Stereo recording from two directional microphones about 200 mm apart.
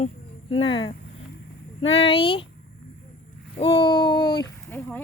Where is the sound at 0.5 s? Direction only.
25° left (ahead or behind).